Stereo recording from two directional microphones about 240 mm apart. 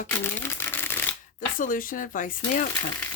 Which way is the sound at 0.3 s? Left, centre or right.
Centre.